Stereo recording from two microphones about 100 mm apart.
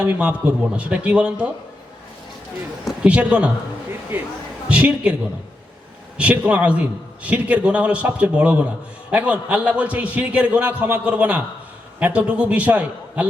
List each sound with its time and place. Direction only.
0.0 s a man's voice: 15° right (ahead or behind)
2.8 s a man's voice: 10° right (ahead or behind)
6.1 s a man's voice: 10° right (ahead or behind)